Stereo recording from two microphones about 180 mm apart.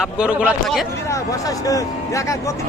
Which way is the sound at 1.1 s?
20° left (ahead or behind).